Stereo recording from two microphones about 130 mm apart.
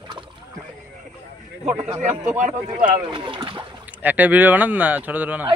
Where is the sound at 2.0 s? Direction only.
70° right (ahead or behind).